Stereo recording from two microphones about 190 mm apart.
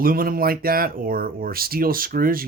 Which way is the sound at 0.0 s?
50° right (ahead or behind).